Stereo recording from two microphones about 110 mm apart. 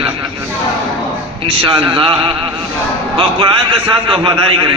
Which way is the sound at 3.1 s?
45° right (ahead or behind).